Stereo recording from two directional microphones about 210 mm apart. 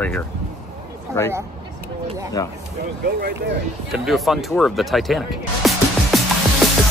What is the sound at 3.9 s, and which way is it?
Speech, centre (ahead or behind).